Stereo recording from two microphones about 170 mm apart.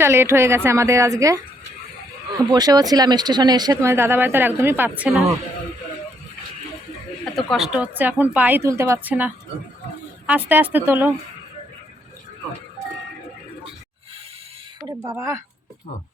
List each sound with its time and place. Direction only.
0.0 s a woman's voice: 15° right (ahead or behind)
2.5 s speech: 25° right (ahead or behind); by 5.2 s 5° right (ahead or behind)
7.5 s a woman's voice: 5° right (ahead or behind)
15.1 s a woman's voice: 15° right (ahead or behind)